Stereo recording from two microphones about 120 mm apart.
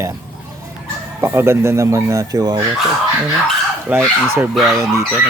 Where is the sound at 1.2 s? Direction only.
20° right (ahead or behind).